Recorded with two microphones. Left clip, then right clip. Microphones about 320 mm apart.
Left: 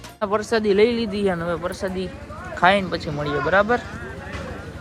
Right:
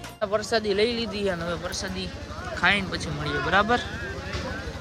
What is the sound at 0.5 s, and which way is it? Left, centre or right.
Speech, centre.